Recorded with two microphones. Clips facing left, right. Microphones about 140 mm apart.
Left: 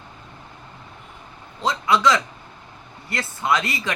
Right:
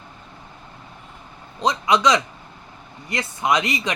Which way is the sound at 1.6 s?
20° right (ahead or behind).